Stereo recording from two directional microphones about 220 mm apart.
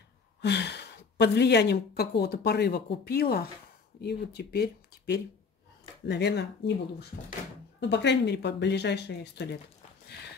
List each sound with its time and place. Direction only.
0.4 s speech: 50° left (ahead or behind)